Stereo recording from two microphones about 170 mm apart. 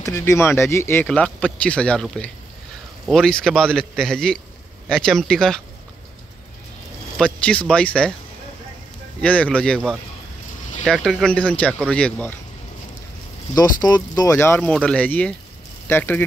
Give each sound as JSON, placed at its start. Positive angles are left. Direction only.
{"t": 0.0, "sound": "a man's voice", "side_deg": 15}
{"t": 7.2, "sound": "a man's voice", "side_deg": 5}
{"t": 9.2, "sound": "a man's voice", "side_deg": 5}
{"t": 13.6, "sound": "speech", "side_deg": 25}